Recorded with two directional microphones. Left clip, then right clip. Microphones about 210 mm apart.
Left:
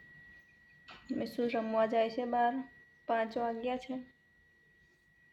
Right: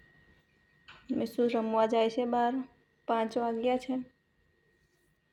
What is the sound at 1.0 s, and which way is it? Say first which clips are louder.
A woman's voice: right 5 dB; 15° right (ahead or behind).